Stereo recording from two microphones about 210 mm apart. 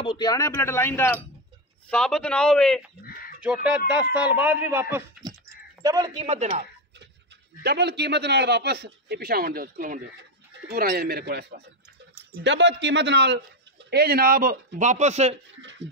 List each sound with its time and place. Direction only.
0.0 s a man's voice: 20° left (ahead or behind); by 6.2 s 15° right (ahead or behind)
6.2 s speech: 30° right (ahead or behind)
7.6 s a man's voice: 50° right (ahead or behind); by 15.3 s 30° right (ahead or behind)